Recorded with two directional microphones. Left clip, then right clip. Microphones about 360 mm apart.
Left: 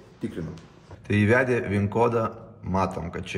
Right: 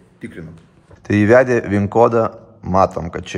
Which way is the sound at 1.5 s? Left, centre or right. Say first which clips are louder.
Right 9 dB; right.